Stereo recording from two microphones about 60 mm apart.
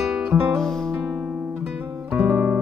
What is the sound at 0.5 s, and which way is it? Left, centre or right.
Music, centre.